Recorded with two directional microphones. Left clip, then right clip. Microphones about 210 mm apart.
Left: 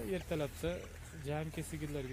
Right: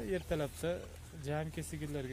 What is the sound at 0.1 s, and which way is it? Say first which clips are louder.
Speech: right 2 dB; 40° right (ahead or behind).